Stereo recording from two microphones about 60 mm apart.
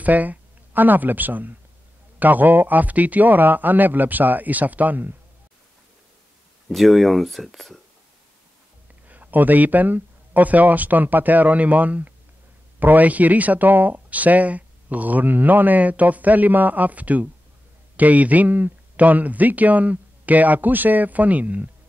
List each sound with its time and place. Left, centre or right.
0.0 s speech: right
6.7 s speech: centre
9.0 s speech: right